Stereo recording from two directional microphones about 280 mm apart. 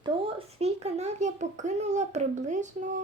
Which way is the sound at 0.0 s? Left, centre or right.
Right.